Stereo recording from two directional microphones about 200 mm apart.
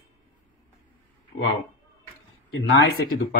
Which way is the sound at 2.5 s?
70° left (ahead or behind).